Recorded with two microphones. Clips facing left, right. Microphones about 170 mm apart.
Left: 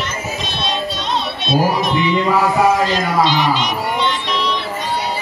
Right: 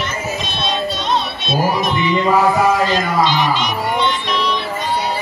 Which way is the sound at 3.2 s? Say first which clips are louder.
Left 1 dB; 50° right (ahead or behind).